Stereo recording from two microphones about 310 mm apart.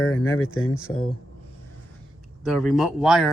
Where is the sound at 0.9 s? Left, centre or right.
Left.